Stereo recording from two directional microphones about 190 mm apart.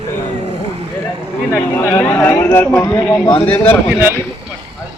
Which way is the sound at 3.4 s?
10° left (ahead or behind).